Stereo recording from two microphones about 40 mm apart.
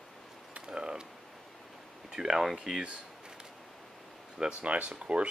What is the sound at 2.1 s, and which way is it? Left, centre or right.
Speech, centre.